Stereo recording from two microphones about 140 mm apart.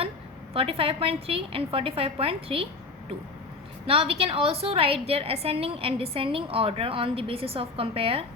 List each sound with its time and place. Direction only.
0.5 s a woman's voice: 45° right (ahead or behind)
3.8 s a woman's voice: 40° right (ahead or behind)